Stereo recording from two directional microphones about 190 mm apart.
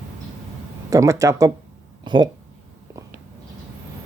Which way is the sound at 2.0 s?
25° right (ahead or behind).